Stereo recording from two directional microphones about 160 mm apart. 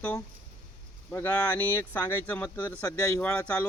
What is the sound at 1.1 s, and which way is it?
A man's voice, 10° left (ahead or behind).